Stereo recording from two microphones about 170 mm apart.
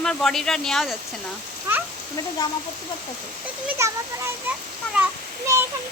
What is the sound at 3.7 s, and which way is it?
Speech, 15° right (ahead or behind).